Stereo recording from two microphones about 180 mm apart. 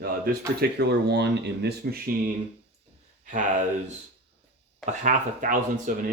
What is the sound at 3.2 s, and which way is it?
Speech, 45° right (ahead or behind).